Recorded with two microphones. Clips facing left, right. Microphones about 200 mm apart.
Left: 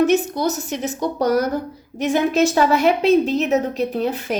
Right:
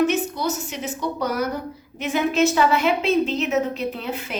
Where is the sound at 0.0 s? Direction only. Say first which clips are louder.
Left 4 dB; 40° left (ahead or behind).